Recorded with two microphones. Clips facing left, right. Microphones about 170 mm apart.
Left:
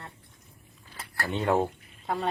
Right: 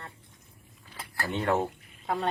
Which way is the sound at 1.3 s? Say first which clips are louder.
Left 2 dB; 10° left (ahead or behind).